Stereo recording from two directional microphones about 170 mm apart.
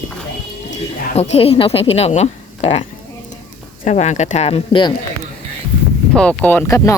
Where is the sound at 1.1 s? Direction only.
40° left (ahead or behind).